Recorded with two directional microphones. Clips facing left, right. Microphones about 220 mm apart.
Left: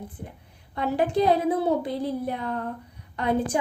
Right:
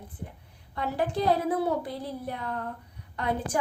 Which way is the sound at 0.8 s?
20° left (ahead or behind).